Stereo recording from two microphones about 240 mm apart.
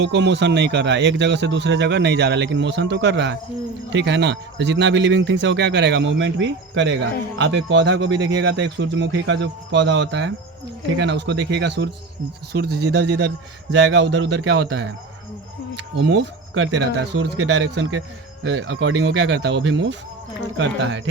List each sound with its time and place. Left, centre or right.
0.0 s speech: right
18.4 s speech: right